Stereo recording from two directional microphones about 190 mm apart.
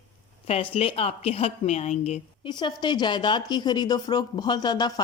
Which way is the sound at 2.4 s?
25° left (ahead or behind).